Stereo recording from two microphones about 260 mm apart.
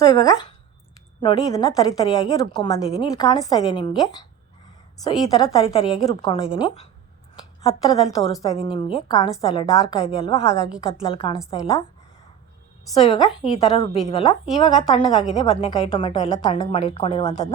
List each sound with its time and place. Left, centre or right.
0.0 s a woman's voice: centre
12.9 s a woman's voice: left